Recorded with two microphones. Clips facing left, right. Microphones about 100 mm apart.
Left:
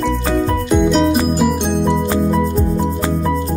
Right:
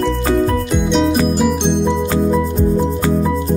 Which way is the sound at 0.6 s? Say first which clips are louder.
Left 2 dB; centre (ahead or behind).